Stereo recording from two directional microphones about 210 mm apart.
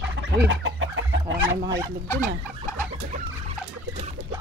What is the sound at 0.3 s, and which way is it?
Chicken, 60° right (ahead or behind).